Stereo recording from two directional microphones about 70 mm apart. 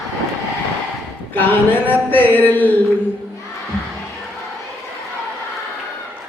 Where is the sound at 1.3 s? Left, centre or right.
Left.